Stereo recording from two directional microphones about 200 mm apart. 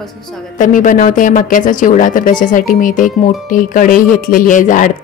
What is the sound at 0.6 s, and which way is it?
Speech, 40° left (ahead or behind).